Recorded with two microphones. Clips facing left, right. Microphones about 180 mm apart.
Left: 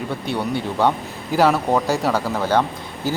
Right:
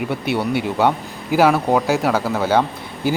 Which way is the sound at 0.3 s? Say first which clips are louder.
Right 2 dB; 5° right (ahead or behind).